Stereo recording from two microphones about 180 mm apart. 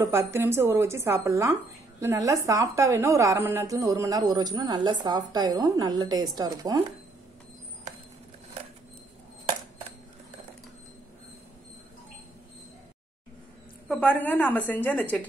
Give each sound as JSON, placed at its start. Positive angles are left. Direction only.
{"t": 0.0, "sound": "speech", "side_deg": -15}
{"t": 13.8, "sound": "a woman's voice", "side_deg": 5}